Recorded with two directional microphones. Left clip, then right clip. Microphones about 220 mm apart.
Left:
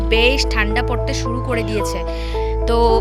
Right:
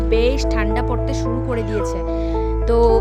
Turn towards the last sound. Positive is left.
turn(degrees=-10)  # may be behind; listen again after turning